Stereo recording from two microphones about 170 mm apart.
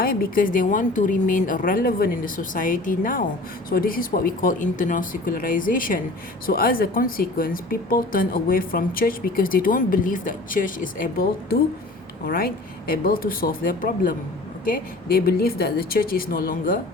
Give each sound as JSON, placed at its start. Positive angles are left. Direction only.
{"t": 0.0, "sound": "a woman's voice", "side_deg": 60}